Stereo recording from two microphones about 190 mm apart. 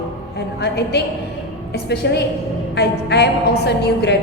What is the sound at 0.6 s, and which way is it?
A woman's voice, 60° left (ahead or behind).